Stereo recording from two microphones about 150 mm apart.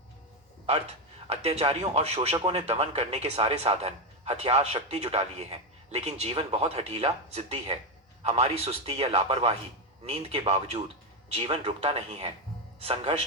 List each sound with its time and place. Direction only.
1.3 s a man's voice: 45° right (ahead or behind)